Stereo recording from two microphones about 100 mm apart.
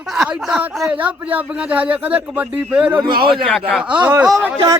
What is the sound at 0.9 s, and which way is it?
Speech, 15° right (ahead or behind).